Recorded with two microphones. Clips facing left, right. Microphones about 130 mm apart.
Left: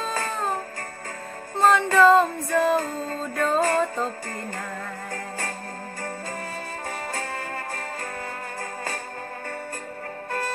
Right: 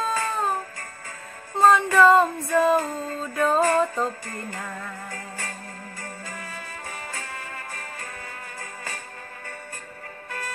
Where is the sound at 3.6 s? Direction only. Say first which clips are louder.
Right 1 dB; 35° left (ahead or behind).